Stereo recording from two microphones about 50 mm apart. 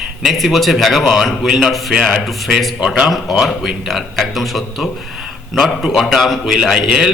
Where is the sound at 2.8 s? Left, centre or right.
Centre.